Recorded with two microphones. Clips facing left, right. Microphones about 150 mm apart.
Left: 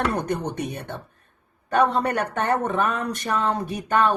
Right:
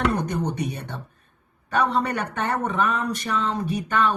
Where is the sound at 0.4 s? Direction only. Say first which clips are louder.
Right 1 dB; 50° left (ahead or behind).